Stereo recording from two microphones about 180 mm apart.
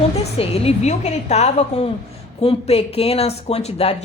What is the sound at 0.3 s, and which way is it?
A woman's voice, 35° left (ahead or behind).